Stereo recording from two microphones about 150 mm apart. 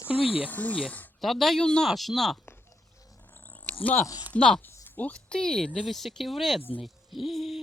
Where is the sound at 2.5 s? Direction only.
20° left (ahead or behind).